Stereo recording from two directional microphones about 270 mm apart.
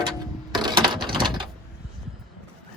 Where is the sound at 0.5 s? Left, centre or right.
Centre.